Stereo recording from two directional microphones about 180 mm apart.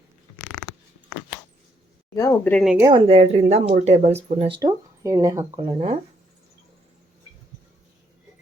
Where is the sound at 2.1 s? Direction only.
15° left (ahead or behind).